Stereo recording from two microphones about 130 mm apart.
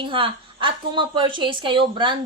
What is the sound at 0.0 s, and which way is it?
A woman's voice, 40° right (ahead or behind).